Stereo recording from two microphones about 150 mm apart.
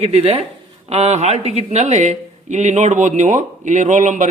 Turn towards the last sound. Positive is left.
turn(degrees=-60)  # may be behind; listen again after turning